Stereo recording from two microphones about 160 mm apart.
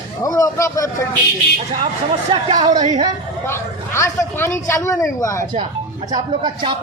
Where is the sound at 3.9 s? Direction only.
20° left (ahead or behind).